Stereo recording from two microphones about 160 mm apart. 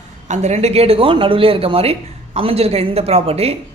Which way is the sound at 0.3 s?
45° right (ahead or behind).